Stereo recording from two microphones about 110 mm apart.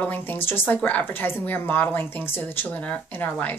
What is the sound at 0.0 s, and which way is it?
A woman's voice, 15° left (ahead or behind).